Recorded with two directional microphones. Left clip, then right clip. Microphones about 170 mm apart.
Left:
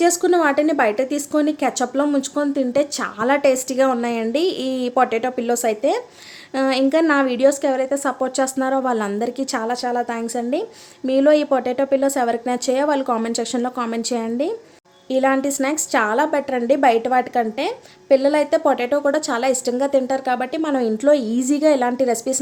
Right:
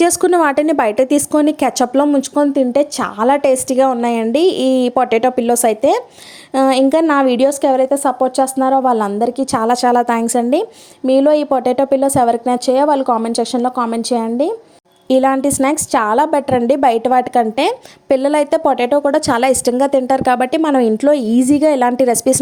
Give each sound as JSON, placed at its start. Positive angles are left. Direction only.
{"t": 0.0, "sound": "a woman's voice", "side_deg": -50}
{"t": 9.6, "sound": "a woman's voice", "side_deg": -45}
{"t": 15.1, "sound": "a woman's voice", "side_deg": -40}